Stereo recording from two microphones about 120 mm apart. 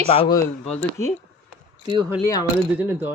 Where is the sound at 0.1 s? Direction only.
55° left (ahead or behind).